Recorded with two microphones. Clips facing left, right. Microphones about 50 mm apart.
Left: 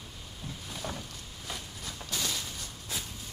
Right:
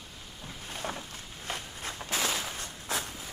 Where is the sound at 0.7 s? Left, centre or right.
Right.